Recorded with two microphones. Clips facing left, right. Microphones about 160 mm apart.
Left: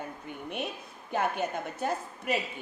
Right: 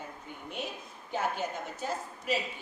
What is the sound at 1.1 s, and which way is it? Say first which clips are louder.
A woman's voice: left 3 dB; 60° left (ahead or behind).